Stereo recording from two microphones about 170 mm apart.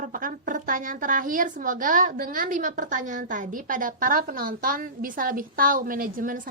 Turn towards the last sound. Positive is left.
turn(degrees=-55)  # may be behind; listen again after turning